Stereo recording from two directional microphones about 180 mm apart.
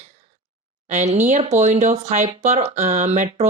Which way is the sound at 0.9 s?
40° right (ahead or behind).